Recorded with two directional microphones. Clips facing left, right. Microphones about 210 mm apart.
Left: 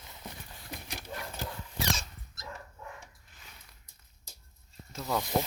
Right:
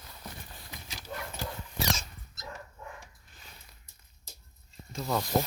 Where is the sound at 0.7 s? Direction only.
55° left (ahead or behind).